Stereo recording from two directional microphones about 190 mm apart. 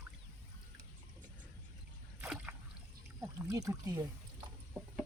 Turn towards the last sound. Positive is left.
turn(degrees=-20)  # may be behind; listen again after turning